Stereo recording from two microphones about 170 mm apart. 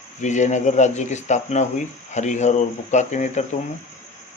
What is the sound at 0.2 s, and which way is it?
Speech, 45° left (ahead or behind).